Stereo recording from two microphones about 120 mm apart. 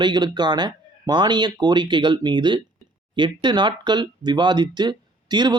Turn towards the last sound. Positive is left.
turn(degrees=-35)  # may be behind; listen again after turning